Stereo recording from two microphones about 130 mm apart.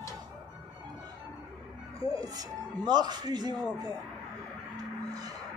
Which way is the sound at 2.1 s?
30° right (ahead or behind).